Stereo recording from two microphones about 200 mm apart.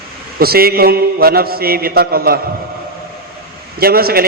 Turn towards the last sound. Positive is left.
turn(degrees=-50)  # may be behind; listen again after turning